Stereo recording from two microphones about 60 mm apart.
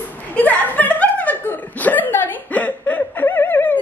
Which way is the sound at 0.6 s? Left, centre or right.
Left.